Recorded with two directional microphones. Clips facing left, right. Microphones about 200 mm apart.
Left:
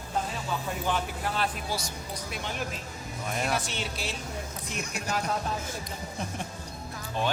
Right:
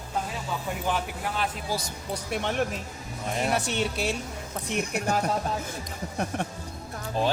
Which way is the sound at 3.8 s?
60° right (ahead or behind).